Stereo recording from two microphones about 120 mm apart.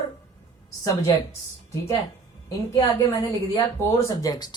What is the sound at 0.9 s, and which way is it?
Speech, 30° left (ahead or behind).